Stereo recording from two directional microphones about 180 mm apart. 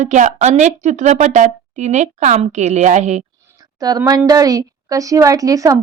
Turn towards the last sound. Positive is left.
turn(degrees=-20)  # may be behind; listen again after turning